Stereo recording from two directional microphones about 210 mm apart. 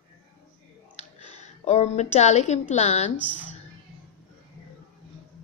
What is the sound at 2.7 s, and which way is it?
Speech, 30° left (ahead or behind).